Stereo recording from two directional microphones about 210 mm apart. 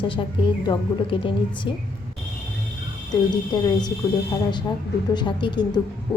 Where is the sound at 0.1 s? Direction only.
25° left (ahead or behind).